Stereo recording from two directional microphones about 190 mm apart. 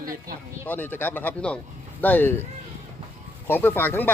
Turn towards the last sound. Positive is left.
turn(degrees=10)  # may be behind; listen again after turning